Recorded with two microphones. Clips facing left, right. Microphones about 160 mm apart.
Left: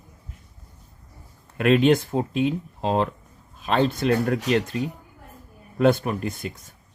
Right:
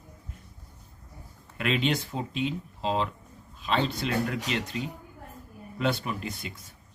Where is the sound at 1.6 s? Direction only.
50° left (ahead or behind).